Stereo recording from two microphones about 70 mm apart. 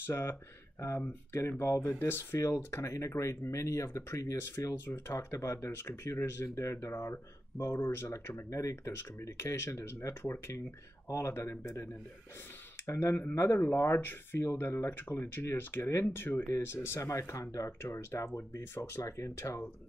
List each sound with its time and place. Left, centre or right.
0.0 s speech: left
2.5 s speech: left
12.8 s speech: left